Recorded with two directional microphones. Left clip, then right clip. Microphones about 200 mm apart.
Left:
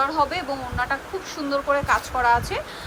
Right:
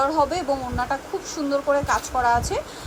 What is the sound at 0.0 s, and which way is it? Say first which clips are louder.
Speech: right 1 dB; 20° right (ahead or behind).